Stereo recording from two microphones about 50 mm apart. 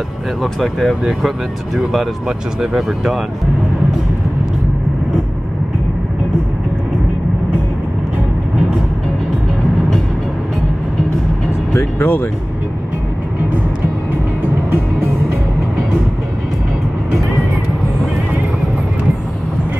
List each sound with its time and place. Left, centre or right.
0.4 s speech: centre
2.2 s speech: centre
12.0 s speech: left